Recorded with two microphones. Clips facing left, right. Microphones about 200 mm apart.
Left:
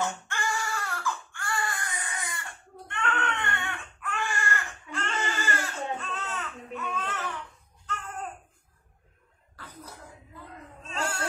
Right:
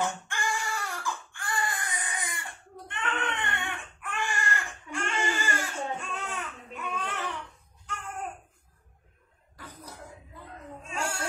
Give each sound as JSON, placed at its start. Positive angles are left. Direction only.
{"t": 0.0, "sound": "baby cry", "side_deg": -15}
{"t": 9.6, "sound": "cough", "side_deg": -15}